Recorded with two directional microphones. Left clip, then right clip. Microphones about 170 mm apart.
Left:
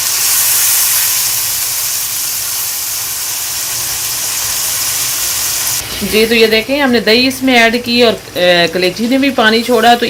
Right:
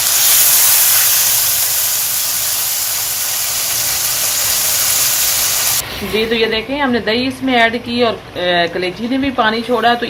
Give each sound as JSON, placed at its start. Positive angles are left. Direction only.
{"t": 6.1, "sound": "a woman's voice", "side_deg": 60}